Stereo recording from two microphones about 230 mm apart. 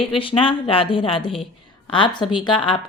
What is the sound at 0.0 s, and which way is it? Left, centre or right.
A woman's voice, left.